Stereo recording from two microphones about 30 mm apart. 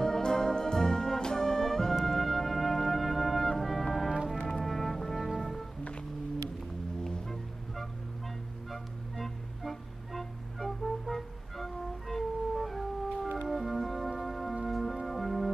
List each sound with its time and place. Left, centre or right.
0.0 s music: centre
4.4 s brass instrument: centre
5.4 s music: centre
9.1 s music: centre